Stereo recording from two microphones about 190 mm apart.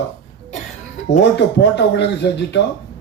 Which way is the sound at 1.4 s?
65° left (ahead or behind).